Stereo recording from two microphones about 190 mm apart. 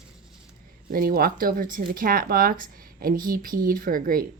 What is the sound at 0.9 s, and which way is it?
Speech, 50° right (ahead or behind).